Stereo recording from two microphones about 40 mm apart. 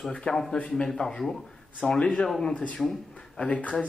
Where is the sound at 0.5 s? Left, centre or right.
Left.